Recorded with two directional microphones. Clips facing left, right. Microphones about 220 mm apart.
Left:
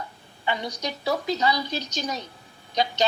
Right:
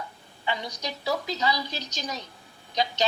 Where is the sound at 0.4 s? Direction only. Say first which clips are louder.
Left 3 dB; 55° left (ahead or behind).